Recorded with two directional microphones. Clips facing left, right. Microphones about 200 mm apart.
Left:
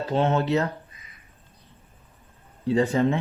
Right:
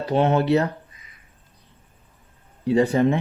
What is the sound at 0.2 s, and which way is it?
Speech, 15° right (ahead or behind).